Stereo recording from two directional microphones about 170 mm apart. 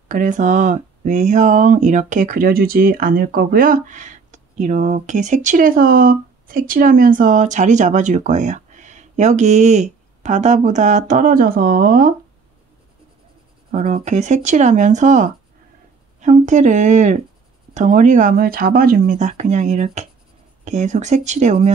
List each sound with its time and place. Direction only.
0.1 s speech: 50° right (ahead or behind)
13.7 s speech: 45° right (ahead or behind)